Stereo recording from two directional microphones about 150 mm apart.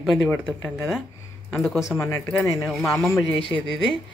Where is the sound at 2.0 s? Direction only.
15° left (ahead or behind).